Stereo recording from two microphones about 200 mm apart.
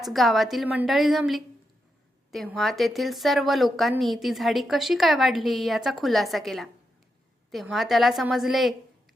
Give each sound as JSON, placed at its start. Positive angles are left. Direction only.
{"t": 0.0, "sound": "a woman's voice", "side_deg": 0}